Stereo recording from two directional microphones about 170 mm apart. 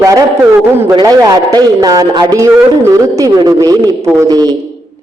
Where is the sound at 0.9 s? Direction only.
25° right (ahead or behind).